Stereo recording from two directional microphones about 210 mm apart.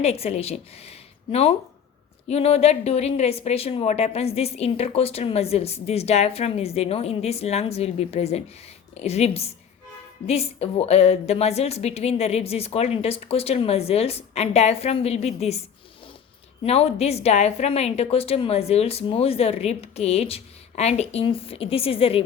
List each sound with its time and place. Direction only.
0.0 s a woman's voice: 30° left (ahead or behind)
16.6 s a woman's voice: 30° left (ahead or behind)